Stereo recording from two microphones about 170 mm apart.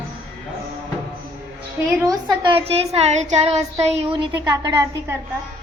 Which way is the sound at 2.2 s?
30° right (ahead or behind).